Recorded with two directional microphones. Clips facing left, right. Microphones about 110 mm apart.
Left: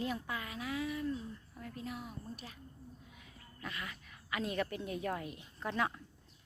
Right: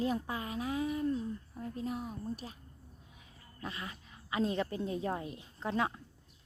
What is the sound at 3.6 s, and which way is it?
A woman's voice, 30° right (ahead or behind).